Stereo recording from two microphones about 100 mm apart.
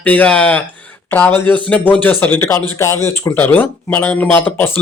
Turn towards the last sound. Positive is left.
turn(degrees=20)  # may be behind; listen again after turning